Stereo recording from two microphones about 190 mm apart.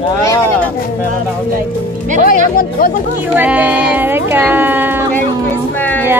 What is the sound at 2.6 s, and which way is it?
Speech, 50° left (ahead or behind).